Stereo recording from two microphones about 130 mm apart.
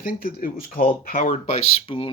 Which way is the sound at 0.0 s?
90° left.